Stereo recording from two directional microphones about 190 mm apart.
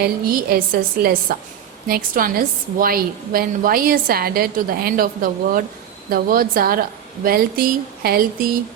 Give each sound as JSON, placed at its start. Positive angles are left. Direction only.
{"t": 0.0, "sound": "a woman's voice", "side_deg": -50}